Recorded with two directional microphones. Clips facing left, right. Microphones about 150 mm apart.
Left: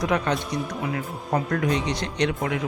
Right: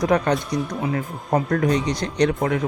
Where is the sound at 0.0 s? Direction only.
40° right (ahead or behind).